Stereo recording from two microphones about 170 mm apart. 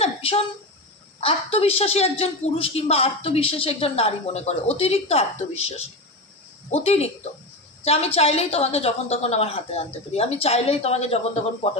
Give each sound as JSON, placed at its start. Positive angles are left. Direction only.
{"t": 0.0, "sound": "a woman's voice", "side_deg": 35}